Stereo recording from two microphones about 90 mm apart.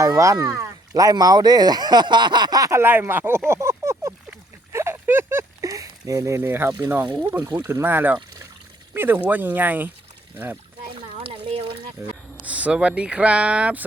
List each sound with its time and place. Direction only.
0.0 s speech: 35° right (ahead or behind)
1.0 s speech: 45° right (ahead or behind)
2.8 s speech: 25° right (ahead or behind)
4.7 s a sound: 30° right (ahead or behind)
7.6 s speech: 25° right (ahead or behind)
10.9 s a sound: 85° right
12.5 s speech: 15° right (ahead or behind)